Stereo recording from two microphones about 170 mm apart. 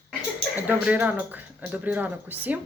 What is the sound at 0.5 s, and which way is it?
Speech, 10° right (ahead or behind).